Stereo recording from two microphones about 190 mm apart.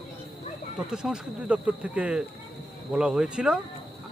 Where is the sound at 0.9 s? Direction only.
5° right (ahead or behind).